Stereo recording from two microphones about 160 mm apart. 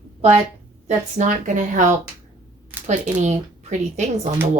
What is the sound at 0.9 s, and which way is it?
Speech, 50° right (ahead or behind).